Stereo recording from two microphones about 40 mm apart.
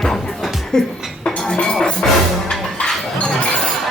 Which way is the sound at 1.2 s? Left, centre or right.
Left.